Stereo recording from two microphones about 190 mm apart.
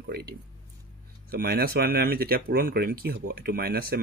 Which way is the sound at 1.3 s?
55° right (ahead or behind).